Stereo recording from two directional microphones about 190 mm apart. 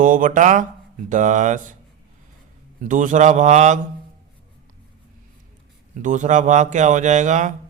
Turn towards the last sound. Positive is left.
turn(degrees=-40)  # may be behind; listen again after turning